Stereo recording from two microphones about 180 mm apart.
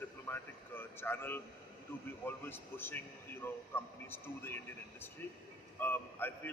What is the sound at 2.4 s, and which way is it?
A man's voice, 10° left (ahead or behind).